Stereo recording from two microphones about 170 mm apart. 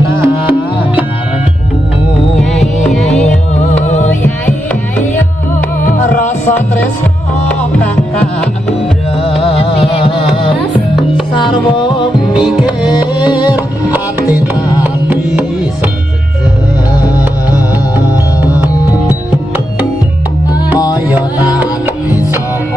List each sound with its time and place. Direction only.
0.2 s music: 10° right (ahead or behind)
2.9 s music: centre (ahead or behind)
3.5 s music: 45° left (ahead or behind)
5.9 s music: 50° left (ahead or behind)
9.1 s music: 35° left (ahead or behind)
12.3 s music: 5° right (ahead or behind)
14.5 s tabla: 10° right (ahead or behind)
16.9 s music: 20° left (ahead or behind)